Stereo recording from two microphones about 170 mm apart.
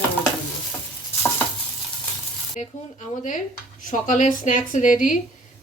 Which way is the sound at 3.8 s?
50° left (ahead or behind).